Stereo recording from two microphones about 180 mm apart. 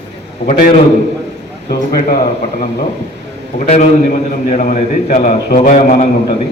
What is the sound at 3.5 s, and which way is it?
A man's voice, 50° left (ahead or behind).